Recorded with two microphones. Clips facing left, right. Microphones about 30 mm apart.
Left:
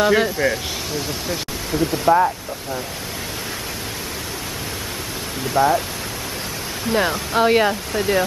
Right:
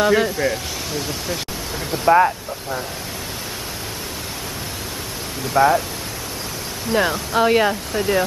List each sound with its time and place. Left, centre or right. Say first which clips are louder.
0.0 s speech: even; centre
2.1 s speech: right 2 dB; right
5.5 s speech: right 2 dB; right
6.9 s speech: right 1 dB; centre